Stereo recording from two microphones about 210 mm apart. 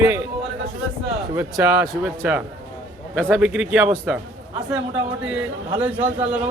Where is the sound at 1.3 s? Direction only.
15° right (ahead or behind).